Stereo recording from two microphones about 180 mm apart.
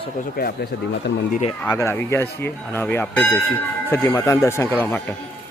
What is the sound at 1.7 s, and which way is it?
Speech, 15° left (ahead or behind).